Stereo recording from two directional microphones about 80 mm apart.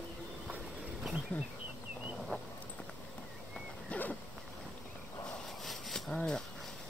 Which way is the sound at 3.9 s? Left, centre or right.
Centre.